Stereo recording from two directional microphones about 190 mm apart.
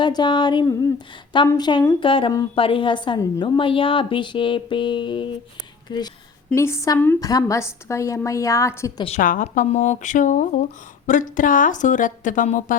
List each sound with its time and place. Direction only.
0.0 s a woman's voice: 25° left (ahead or behind)
9.0 s speech: 40° left (ahead or behind)